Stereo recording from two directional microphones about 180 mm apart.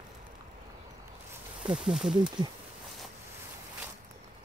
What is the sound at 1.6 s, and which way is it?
Speech, 5° right (ahead or behind).